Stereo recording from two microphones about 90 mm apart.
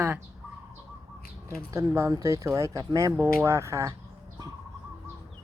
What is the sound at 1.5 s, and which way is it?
Speech, 30° right (ahead or behind).